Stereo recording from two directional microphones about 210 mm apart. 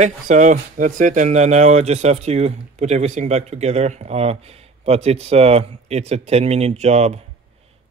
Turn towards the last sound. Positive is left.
turn(degrees=-30)  # may be behind; listen again after turning